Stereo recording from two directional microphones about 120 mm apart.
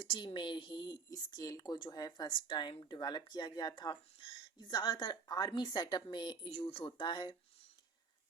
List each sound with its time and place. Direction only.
0.0 s speech: 40° left (ahead or behind)